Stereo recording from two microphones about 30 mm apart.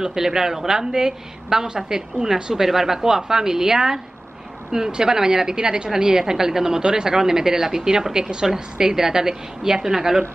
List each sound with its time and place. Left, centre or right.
0.0 s speech: centre